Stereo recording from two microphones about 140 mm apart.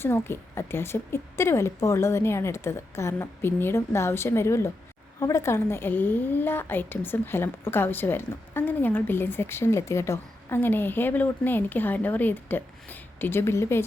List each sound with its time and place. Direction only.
0.0 s a woman's voice: 15° left (ahead or behind)